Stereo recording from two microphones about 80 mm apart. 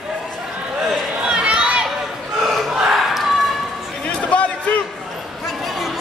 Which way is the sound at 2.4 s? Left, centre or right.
Centre.